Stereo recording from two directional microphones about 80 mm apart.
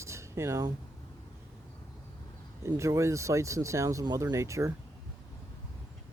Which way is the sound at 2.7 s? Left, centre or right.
Right.